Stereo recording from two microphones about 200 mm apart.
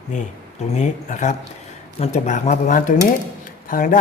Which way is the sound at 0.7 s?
35° left (ahead or behind).